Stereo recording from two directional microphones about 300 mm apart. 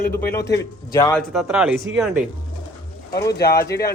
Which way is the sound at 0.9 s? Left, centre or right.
Centre.